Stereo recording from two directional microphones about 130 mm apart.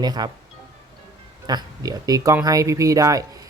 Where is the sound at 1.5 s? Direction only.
30° right (ahead or behind).